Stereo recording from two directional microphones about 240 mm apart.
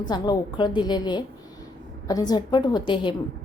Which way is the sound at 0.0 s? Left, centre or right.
Centre.